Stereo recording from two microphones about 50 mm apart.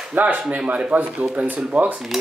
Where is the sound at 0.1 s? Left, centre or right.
Right.